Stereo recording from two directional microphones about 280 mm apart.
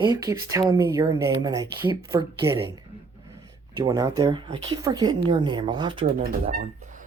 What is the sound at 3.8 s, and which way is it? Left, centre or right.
Speech, centre.